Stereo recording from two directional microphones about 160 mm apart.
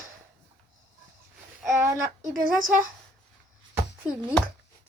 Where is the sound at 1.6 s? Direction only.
20° right (ahead or behind).